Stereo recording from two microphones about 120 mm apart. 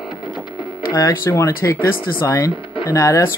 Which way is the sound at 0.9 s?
25° left (ahead or behind).